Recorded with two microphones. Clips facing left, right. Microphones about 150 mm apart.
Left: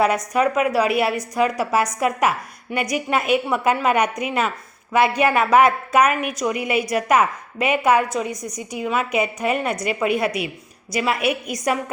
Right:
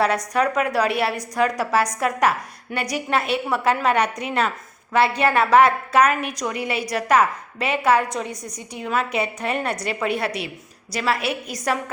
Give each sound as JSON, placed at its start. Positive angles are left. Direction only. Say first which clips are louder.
{"t": 0.3, "sound": "a woman's voice", "louder": "left 2 dB", "side_deg": 5}
{"t": 11.2, "sound": "a woman's voice", "louder": "left 4 dB", "side_deg": -30}